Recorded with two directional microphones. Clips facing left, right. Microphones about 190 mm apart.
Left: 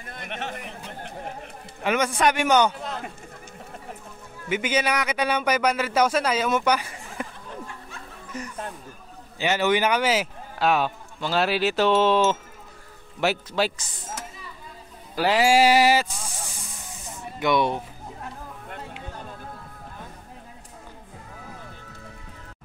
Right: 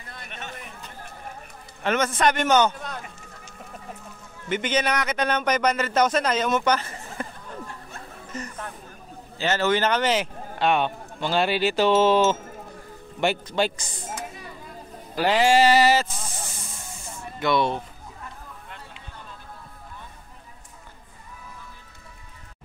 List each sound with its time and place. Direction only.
0.3 s a man's voice: 75° left (ahead or behind)
1.8 s speech: 10° left (ahead or behind)
4.5 s speech: 10° left (ahead or behind)
8.3 s chatter: 10° left (ahead or behind)
9.4 s a man's voice: 15° left (ahead or behind)
15.1 s speech: 5° left (ahead or behind)
17.4 s speech: 15° left (ahead or behind)
18.7 s music: 50° left (ahead or behind)